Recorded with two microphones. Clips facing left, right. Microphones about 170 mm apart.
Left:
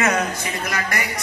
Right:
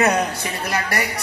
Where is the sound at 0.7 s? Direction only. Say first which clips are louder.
Right 4 dB; 35° right (ahead or behind).